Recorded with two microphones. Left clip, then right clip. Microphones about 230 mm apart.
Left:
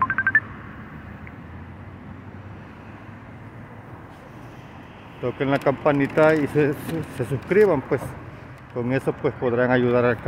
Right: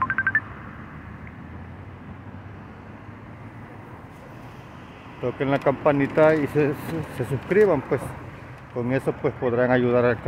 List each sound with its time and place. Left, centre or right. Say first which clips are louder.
0.0 s telephone dialing: left 3 dB; centre
5.2 s speech: left 1 dB; centre